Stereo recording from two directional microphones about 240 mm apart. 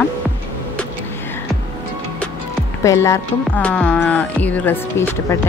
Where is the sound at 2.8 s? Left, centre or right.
Centre.